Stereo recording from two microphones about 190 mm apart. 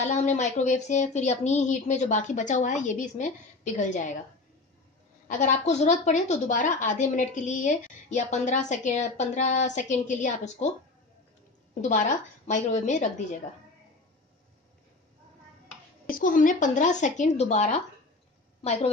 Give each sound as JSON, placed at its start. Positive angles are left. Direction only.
{"t": 0.0, "sound": "a woman's voice", "side_deg": 40}
{"t": 5.3, "sound": "a woman's voice", "side_deg": 40}
{"t": 11.8, "sound": "a woman's voice", "side_deg": 40}
{"t": 16.1, "sound": "a woman's voice", "side_deg": 45}